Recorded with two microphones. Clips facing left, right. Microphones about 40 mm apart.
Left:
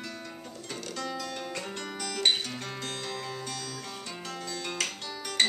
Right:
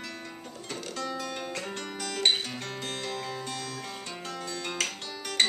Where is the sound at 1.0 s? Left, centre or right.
Centre.